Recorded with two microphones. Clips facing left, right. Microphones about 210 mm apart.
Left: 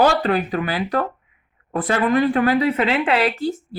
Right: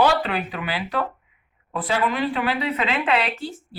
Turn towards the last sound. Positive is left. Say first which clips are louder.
# left 7 dB
turn(degrees=40)  # may be behind; listen again after turning